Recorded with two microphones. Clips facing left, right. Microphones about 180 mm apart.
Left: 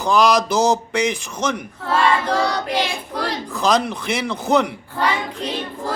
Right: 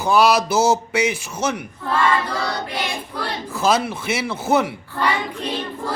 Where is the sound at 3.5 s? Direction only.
5° right (ahead or behind).